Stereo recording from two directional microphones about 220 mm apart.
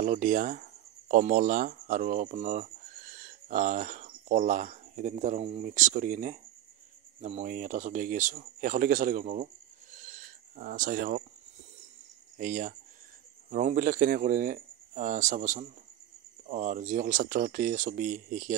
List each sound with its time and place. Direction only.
0.0 s speech: 35° right (ahead or behind)
12.4 s speech: 35° right (ahead or behind)